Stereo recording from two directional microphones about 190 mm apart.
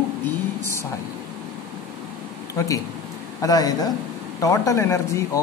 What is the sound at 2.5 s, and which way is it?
Speech, 15° left (ahead or behind).